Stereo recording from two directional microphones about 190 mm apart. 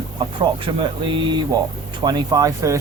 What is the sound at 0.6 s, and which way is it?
Speech, 25° right (ahead or behind).